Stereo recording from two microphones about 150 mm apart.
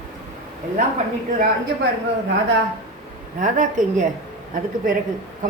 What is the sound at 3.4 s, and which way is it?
Speech, 60° right (ahead or behind).